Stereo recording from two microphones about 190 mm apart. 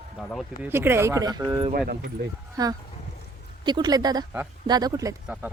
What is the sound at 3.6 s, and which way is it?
Speech, 25° right (ahead or behind).